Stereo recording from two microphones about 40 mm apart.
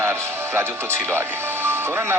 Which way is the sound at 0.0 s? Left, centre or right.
Right.